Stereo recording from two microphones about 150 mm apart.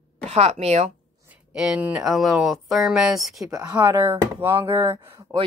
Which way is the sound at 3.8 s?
30° right (ahead or behind).